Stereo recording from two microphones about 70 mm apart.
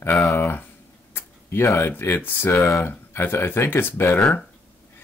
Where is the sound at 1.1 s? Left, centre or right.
Left.